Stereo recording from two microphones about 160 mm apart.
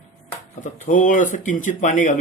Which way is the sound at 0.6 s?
50° left (ahead or behind).